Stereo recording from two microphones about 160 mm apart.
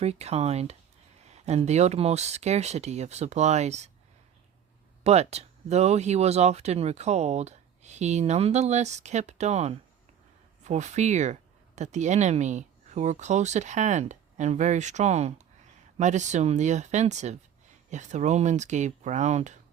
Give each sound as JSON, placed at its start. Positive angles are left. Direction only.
{"t": 0.0, "sound": "speech", "side_deg": -40}
{"t": 5.0, "sound": "speech", "side_deg": -40}